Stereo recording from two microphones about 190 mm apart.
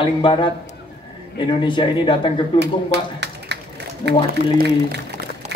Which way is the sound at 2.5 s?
65° right (ahead or behind).